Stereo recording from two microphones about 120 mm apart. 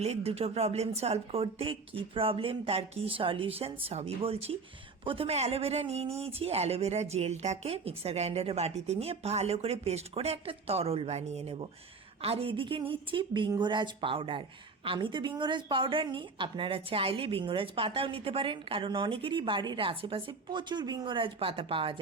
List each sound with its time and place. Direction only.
0.0 s a woman's voice: 60° right (ahead or behind)